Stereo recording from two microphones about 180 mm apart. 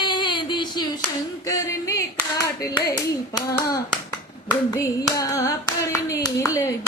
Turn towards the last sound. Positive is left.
turn(degrees=20)  # may be behind; listen again after turning